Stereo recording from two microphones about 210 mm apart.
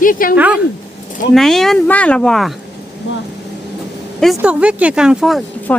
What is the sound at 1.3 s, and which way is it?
Speech, centre (ahead or behind).